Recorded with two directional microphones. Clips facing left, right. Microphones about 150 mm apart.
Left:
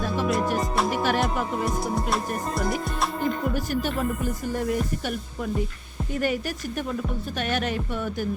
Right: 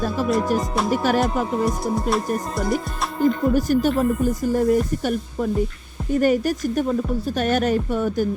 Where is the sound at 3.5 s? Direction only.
40° right (ahead or behind).